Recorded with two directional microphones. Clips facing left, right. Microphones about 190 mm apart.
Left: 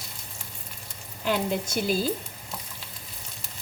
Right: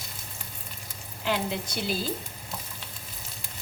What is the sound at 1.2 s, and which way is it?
Speech, 45° left (ahead or behind).